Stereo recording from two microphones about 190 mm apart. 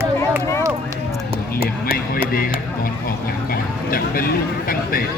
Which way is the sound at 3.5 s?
50° left (ahead or behind).